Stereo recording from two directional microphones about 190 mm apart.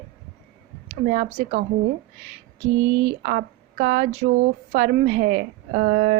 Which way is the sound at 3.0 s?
40° right (ahead or behind).